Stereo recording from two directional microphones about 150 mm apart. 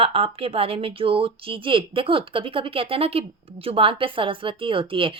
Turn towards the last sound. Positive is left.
turn(degrees=-35)  # may be behind; listen again after turning